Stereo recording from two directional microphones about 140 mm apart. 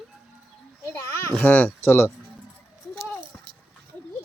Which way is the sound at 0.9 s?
15° left (ahead or behind).